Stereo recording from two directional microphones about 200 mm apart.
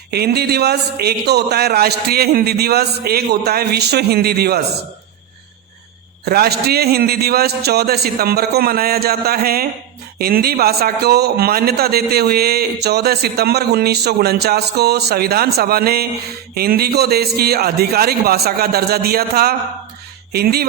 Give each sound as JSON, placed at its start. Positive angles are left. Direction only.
{"t": 0.1, "sound": "a man's voice", "side_deg": -55}
{"t": 6.2, "sound": "a man's voice", "side_deg": -50}